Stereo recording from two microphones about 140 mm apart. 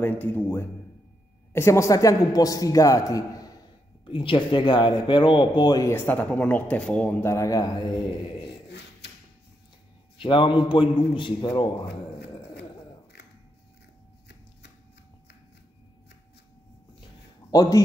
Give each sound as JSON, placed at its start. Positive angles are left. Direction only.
{"t": 0.0, "sound": "a man's voice", "side_deg": 15}
{"t": 4.0, "sound": "speech", "side_deg": 35}
{"t": 5.9, "sound": "speech", "side_deg": 10}
{"t": 10.2, "sound": "speech", "side_deg": 35}
{"t": 17.5, "sound": "a man's voice", "side_deg": 25}